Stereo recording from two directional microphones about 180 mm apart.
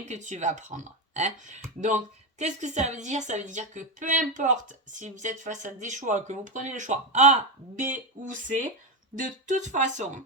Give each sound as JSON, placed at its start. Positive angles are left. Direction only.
{"t": 0.0, "sound": "a woman's voice", "side_deg": -40}